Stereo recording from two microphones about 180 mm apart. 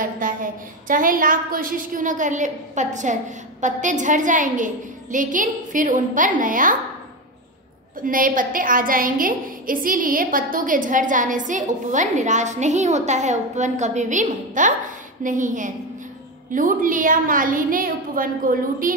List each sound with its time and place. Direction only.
0.0 s a woman's voice: 50° right (ahead or behind)
8.0 s a woman's voice: 50° right (ahead or behind)